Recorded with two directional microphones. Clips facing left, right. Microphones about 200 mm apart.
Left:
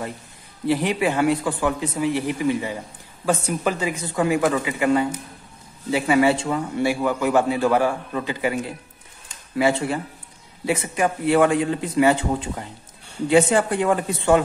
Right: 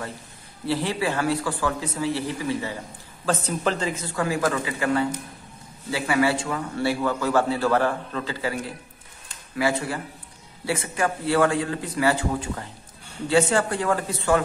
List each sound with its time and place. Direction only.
0.7 s a man's voice: 15° left (ahead or behind)
9.6 s a man's voice: 25° left (ahead or behind)